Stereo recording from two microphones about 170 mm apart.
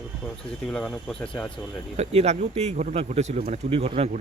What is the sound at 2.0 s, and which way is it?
Speech, 40° right (ahead or behind).